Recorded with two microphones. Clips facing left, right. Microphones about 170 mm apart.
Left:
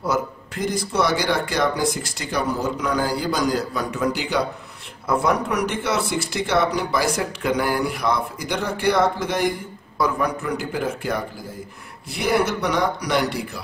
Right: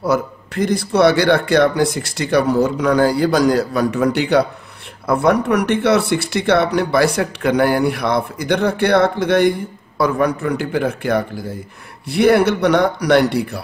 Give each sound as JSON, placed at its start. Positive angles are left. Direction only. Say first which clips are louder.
{"t": 0.7, "sound": "speech", "louder": "right 8 dB", "side_deg": -70}